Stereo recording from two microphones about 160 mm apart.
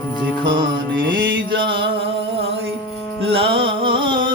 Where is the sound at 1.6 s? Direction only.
30° right (ahead or behind).